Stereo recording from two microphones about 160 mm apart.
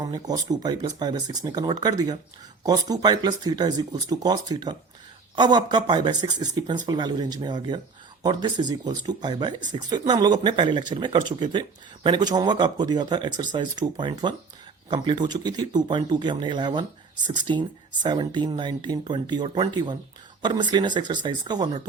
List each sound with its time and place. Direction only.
0.0 s speech: 25° right (ahead or behind)